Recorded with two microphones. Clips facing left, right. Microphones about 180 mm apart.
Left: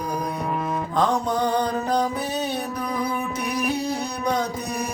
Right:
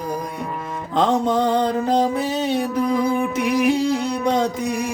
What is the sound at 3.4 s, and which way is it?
Music, 90° right.